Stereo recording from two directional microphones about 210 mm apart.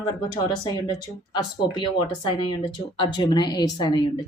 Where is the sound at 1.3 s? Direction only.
20° left (ahead or behind).